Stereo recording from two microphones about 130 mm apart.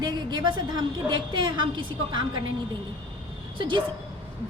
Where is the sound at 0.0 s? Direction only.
30° right (ahead or behind).